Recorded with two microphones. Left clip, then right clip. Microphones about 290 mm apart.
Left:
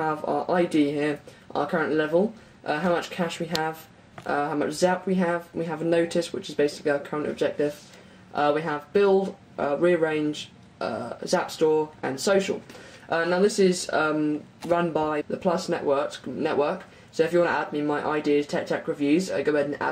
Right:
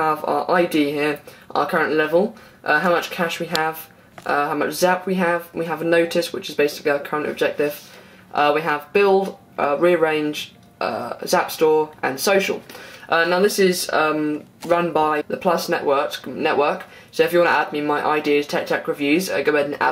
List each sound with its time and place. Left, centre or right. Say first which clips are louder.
0.0 s speech: right 6 dB; right